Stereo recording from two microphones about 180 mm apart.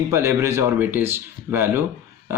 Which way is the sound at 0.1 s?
15° right (ahead or behind).